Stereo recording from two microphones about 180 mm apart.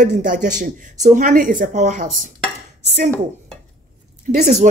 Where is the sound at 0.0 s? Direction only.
45° right (ahead or behind).